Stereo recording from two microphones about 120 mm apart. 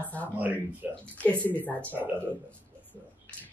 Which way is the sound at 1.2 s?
15° left (ahead or behind).